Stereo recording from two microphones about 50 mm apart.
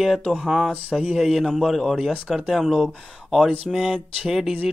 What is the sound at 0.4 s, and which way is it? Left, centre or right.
Speech, centre.